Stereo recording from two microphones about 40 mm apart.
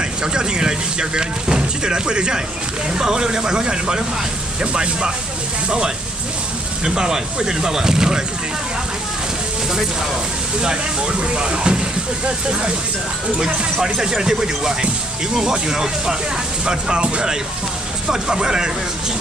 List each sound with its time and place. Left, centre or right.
0.2 s speech: centre
6.8 s speech: centre
10.6 s speech: right
13.4 s speech: centre